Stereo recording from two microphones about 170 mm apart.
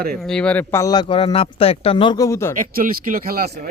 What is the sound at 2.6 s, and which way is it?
Speech, 55° right (ahead or behind).